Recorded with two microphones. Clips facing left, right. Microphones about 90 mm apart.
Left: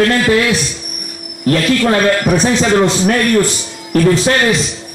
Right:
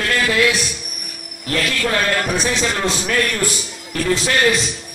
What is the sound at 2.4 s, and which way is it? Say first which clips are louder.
A man's voice: left 8 dB; 45° left (ahead or behind).